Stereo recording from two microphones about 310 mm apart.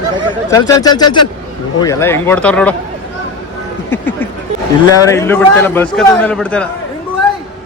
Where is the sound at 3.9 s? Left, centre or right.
Centre.